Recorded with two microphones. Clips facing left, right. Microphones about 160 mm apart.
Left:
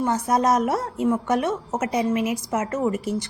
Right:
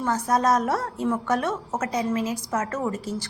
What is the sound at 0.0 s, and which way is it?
A woman's voice, 20° left (ahead or behind).